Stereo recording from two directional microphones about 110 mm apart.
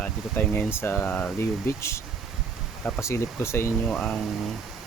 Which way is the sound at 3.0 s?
25° left (ahead or behind).